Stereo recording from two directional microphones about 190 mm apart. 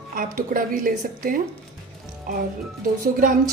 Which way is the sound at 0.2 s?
45° right (ahead or behind).